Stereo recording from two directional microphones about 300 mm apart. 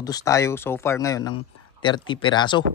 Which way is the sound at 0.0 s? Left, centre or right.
Centre.